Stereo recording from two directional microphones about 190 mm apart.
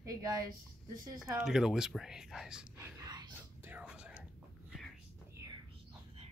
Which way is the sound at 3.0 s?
20° right (ahead or behind).